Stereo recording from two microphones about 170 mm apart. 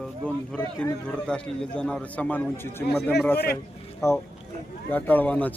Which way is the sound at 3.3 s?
65° left (ahead or behind).